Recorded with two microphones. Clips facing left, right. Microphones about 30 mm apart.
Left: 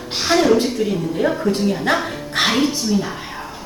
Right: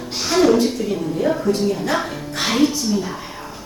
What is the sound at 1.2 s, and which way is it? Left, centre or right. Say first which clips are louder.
Speech: left 1 dB; left.